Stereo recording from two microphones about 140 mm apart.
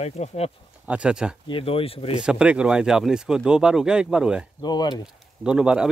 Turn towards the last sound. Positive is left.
turn(degrees=-5)  # may be behind; listen again after turning